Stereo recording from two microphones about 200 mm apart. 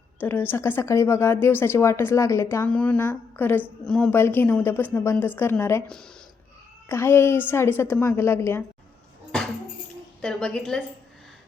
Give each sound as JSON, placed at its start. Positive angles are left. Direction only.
{"t": 0.2, "sound": "speech", "side_deg": 10}
{"t": 10.2, "sound": "a woman's voice", "side_deg": 5}